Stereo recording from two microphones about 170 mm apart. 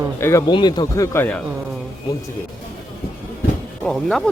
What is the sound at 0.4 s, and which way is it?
Speech, 25° left (ahead or behind).